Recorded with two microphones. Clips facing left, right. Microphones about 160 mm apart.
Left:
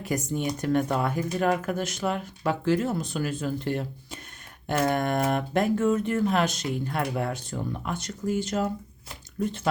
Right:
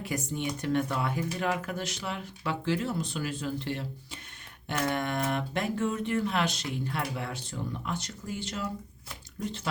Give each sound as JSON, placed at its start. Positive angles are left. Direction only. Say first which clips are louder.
{"t": 0.0, "sound": "speech", "louder": "left 4 dB", "side_deg": 45}